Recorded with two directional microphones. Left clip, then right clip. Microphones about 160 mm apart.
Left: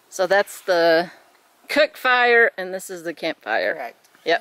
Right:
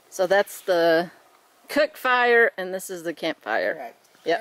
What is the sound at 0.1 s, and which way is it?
Speech, centre (ahead or behind).